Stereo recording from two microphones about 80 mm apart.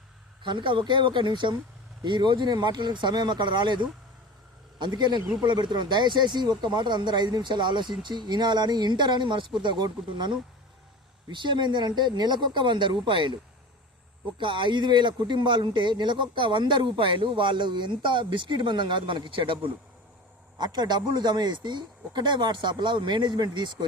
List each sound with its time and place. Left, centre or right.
0.4 s speech: right
2.0 s speech: right
5.4 s speech: right
9.6 s speech: right
14.3 s speech: right
20.6 s speech: right